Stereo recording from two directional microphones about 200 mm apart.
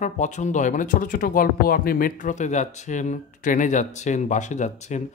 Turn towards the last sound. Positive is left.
turn(degrees=35)  # may be behind; listen again after turning